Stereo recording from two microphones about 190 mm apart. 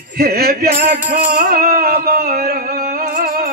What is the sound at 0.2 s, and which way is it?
Speech, 55° right (ahead or behind).